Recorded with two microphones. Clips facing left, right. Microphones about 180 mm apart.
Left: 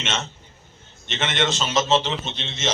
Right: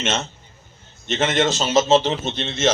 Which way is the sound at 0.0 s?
40° right (ahead or behind).